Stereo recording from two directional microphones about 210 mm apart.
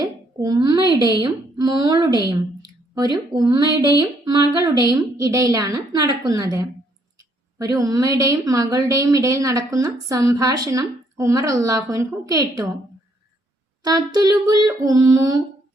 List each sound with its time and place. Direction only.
0.0 s a sound: 20° right (ahead or behind)
1.0 s a woman's voice: 20° right (ahead or behind)
13.8 s a woman's voice: 20° right (ahead or behind)